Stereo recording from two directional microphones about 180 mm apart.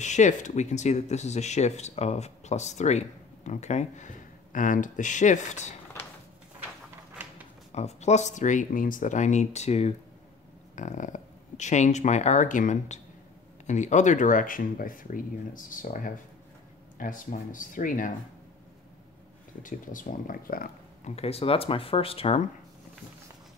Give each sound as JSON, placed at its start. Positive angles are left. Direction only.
{"t": 0.0, "sound": "speech", "side_deg": 40}
{"t": 7.7, "sound": "speech", "side_deg": 35}
{"t": 19.6, "sound": "speech", "side_deg": 45}
{"t": 21.1, "sound": "speech", "side_deg": 35}